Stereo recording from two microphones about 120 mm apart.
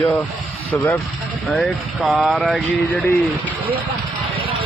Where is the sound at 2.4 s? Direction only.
10° left (ahead or behind).